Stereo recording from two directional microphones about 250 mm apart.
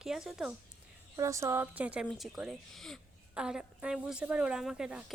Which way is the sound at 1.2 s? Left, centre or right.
Centre.